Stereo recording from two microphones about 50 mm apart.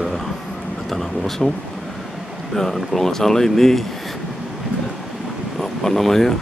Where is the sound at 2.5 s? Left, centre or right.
Centre.